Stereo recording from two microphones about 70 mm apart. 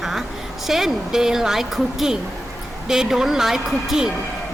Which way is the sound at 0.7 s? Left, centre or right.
Centre.